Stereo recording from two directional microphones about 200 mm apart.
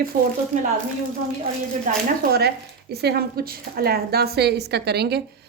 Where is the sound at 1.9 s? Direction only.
40° right (ahead or behind).